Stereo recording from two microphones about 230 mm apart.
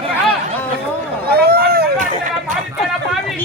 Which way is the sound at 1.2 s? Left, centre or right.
Right.